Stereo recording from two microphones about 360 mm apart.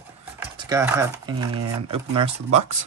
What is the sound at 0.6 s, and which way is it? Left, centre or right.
Speech, centre.